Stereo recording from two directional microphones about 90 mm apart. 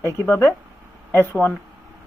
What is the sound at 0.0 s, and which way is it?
Speech, 25° left (ahead or behind).